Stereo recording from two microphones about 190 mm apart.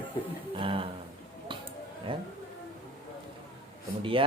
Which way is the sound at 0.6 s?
30° right (ahead or behind).